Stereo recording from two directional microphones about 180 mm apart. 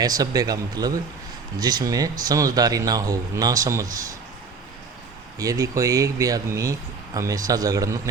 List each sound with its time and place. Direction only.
0.0 s speech: 20° right (ahead or behind)
5.4 s speech: 20° right (ahead or behind)